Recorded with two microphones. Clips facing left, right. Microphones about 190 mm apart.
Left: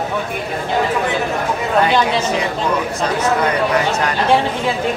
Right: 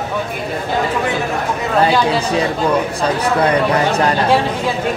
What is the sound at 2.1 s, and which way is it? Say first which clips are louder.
Speech: right 2 dB; 35° right (ahead or behind).